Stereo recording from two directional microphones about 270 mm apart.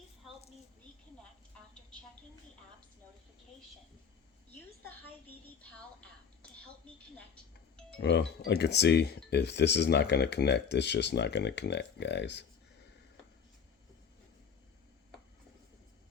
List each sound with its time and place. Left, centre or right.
4.8 s a woman's voice: centre
5.7 s a sound: centre
7.3 s doorbell: centre
8.0 s speech: left